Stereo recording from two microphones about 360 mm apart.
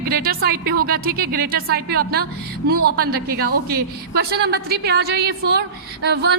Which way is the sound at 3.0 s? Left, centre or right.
Right.